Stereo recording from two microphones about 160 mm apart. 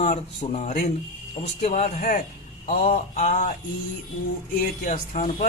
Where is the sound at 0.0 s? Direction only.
45° left (ahead or behind).